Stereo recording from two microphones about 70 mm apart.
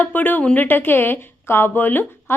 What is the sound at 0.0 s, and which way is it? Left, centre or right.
A woman's voice, left.